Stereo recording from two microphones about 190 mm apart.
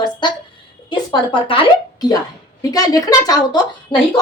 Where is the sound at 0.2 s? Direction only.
25° left (ahead or behind).